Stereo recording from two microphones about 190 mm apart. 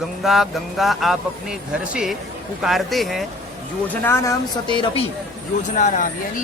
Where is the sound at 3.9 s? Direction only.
15° left (ahead or behind).